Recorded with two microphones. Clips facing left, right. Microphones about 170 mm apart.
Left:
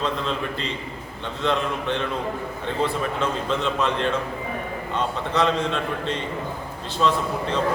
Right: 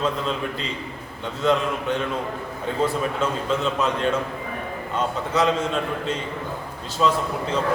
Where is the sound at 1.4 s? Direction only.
5° right (ahead or behind).